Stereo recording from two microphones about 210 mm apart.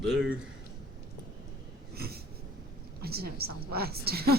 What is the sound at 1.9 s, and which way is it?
Wheeze, 50° right (ahead or behind).